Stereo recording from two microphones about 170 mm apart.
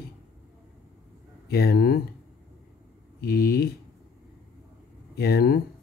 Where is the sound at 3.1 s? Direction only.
65° left (ahead or behind).